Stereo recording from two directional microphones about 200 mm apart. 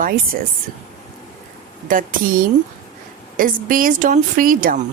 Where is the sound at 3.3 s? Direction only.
45° right (ahead or behind).